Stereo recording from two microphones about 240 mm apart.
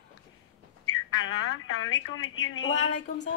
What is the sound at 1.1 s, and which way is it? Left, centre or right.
A woman's voice, left.